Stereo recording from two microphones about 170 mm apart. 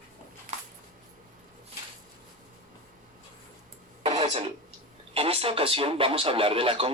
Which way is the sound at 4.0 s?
35° right (ahead or behind).